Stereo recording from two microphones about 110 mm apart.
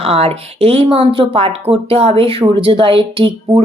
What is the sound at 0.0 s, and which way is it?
Speech, 65° right (ahead or behind).